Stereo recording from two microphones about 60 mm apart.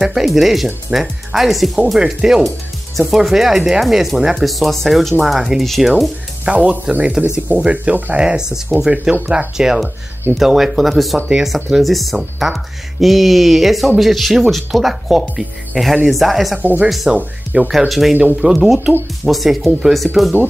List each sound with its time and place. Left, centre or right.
0.0 s speech: centre
6.4 s speech: right
9.1 s speech: right
9.6 s speech: centre
16.5 s speech: right
17.6 s speech: centre